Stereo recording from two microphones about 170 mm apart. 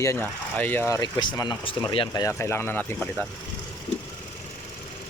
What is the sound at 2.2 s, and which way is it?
Speech, 15° left (ahead or behind).